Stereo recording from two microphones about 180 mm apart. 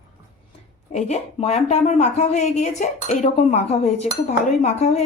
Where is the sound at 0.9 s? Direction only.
40° left (ahead or behind).